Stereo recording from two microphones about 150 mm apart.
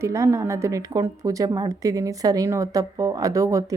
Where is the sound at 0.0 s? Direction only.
20° right (ahead or behind).